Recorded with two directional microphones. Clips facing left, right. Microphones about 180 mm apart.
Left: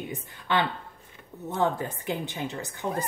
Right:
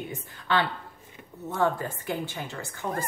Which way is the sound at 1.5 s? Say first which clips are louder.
Even; 20° left (ahead or behind).